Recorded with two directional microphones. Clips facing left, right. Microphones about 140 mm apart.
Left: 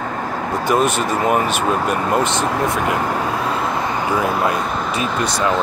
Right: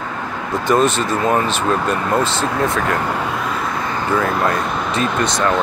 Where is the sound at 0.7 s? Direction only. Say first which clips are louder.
Right 2 dB; 10° left (ahead or behind).